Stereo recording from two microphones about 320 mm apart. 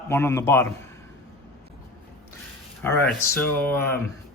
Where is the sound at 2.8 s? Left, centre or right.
Centre.